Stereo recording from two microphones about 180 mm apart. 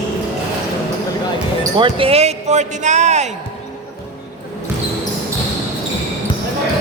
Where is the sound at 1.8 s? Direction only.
30° right (ahead or behind).